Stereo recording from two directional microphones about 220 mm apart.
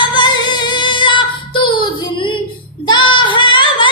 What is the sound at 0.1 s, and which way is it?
Female singing, 20° left (ahead or behind).